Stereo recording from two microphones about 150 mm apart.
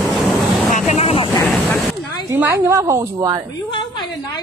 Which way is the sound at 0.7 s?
45° left (ahead or behind).